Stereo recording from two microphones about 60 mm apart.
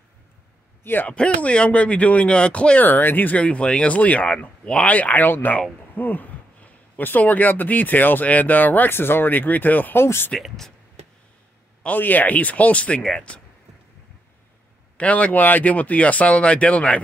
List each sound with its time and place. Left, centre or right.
0.8 s speech: left
1.1 s speech: centre
2.8 s speech: left
10.0 s speech: left
11.8 s speech: left
15.0 s speech: left